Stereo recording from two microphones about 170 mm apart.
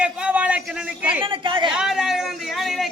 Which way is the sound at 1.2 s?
30° right (ahead or behind).